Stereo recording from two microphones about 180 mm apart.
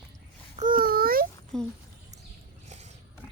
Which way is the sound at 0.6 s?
50° right (ahead or behind).